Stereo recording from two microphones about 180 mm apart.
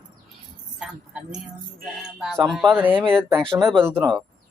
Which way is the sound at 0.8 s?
5° right (ahead or behind).